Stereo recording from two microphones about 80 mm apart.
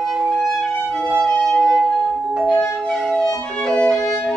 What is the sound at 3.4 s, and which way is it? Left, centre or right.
Violin, centre.